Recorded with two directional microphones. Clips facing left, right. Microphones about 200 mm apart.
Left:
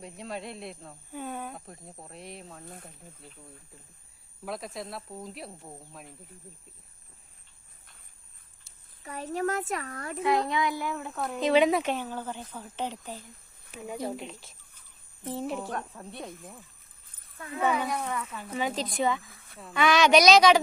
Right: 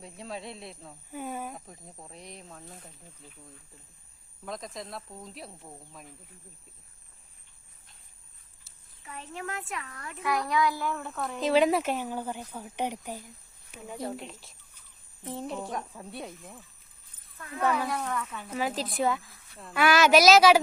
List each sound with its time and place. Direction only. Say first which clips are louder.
0.0 s speech: left 2 dB; centre (ahead or behind)
4.4 s speech: left 2 dB; 5° left (ahead or behind)
9.0 s a child's voice: left 9 dB; 40° left (ahead or behind)
10.2 s a child's voice: left 1 dB; 25° left (ahead or behind)
11.2 s speech: left 1 dB; centre (ahead or behind)
14.0 s speech: right 1 dB; centre (ahead or behind)
15.9 s speech: even; 5° right (ahead or behind)
17.3 s speech: left 3 dB; 30° left (ahead or behind)
17.6 s speech: even; centre (ahead or behind)